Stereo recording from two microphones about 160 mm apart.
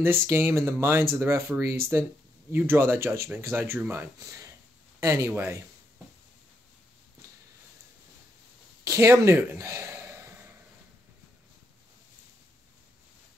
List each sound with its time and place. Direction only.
0.0 s speech: 15° right (ahead or behind)
8.8 s speech: 20° right (ahead or behind)